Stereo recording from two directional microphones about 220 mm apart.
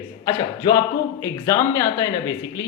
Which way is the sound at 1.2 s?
15° left (ahead or behind).